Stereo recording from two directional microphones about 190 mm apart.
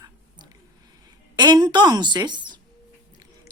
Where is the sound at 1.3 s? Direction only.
20° right (ahead or behind).